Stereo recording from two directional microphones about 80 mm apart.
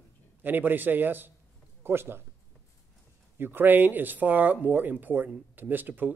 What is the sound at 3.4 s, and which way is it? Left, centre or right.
Speech, right.